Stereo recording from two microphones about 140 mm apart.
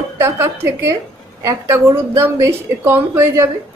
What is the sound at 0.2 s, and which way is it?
A woman's voice, 20° right (ahead or behind).